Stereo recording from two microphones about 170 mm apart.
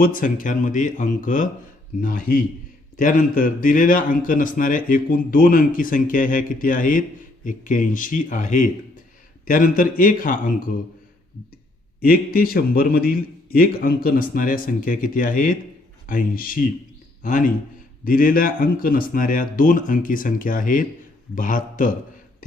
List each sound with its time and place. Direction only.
0.0 s a man's voice: 55° left (ahead or behind)
11.9 s a man's voice: 60° left (ahead or behind)